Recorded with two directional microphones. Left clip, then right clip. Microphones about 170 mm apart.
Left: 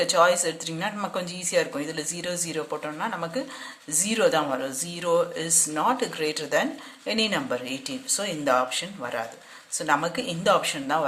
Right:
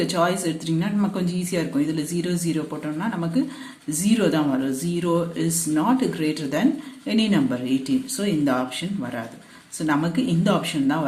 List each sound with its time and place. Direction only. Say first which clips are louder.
0.0 s speech: left 2 dB; 30° left (ahead or behind)